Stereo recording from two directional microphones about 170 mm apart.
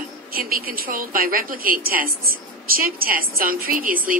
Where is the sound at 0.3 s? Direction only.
60° right (ahead or behind).